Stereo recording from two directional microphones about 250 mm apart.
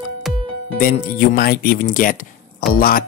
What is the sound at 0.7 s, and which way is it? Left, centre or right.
Speech, left.